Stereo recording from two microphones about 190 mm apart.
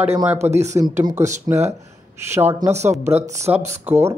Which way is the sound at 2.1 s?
15° right (ahead or behind).